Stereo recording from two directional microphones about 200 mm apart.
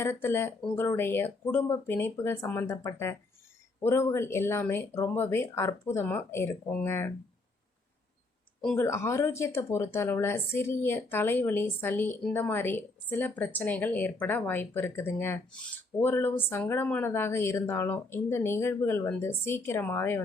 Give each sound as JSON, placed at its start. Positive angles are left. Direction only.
{"t": 0.0, "sound": "speech", "side_deg": 10}
{"t": 8.6, "sound": "speech", "side_deg": 10}